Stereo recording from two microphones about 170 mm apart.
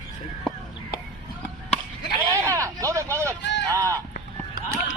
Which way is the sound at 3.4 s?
90° left.